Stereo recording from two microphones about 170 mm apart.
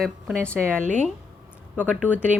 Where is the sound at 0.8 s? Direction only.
45° right (ahead or behind).